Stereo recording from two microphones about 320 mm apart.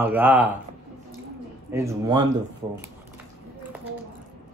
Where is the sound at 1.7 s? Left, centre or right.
Centre.